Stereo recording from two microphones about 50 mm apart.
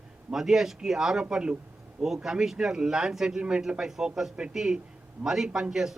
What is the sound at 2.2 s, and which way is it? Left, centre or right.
A man's voice, centre.